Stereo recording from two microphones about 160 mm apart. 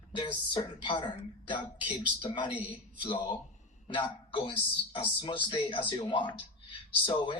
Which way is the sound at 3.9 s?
30° left (ahead or behind).